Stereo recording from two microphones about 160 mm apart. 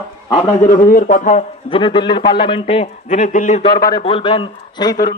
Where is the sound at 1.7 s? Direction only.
30° left (ahead or behind); by 3.6 s 50° left (ahead or behind).